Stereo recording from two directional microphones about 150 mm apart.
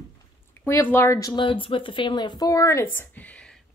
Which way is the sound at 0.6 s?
15° left (ahead or behind).